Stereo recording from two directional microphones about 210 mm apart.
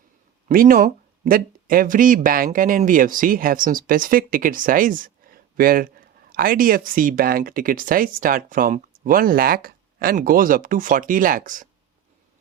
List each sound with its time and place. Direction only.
0.4 s speech: 40° right (ahead or behind)